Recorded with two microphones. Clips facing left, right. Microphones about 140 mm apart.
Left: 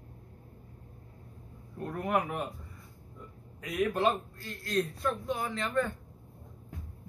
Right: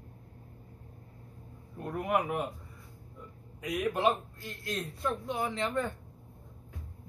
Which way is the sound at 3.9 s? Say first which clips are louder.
Right 4 dB; 15° right (ahead or behind).